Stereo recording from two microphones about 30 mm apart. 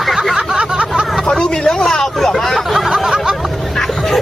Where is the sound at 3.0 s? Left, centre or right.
Centre.